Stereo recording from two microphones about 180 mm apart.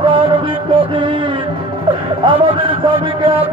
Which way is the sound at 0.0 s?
30° right (ahead or behind).